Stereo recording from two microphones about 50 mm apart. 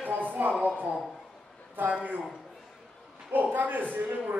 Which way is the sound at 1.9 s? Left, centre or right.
Right.